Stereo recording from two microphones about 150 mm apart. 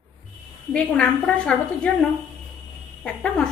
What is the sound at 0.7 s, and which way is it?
A woman's voice, 10° left (ahead or behind).